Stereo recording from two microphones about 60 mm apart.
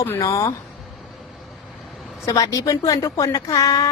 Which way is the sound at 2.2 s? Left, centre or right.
Left.